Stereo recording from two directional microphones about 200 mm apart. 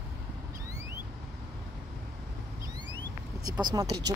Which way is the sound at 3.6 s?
20° right (ahead or behind).